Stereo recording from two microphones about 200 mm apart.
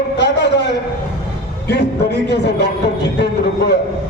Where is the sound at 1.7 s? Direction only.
55° left (ahead or behind).